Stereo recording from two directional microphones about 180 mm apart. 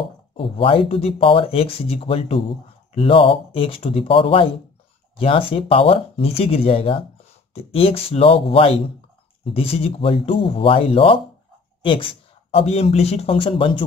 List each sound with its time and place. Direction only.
0.4 s speech: 30° left (ahead or behind)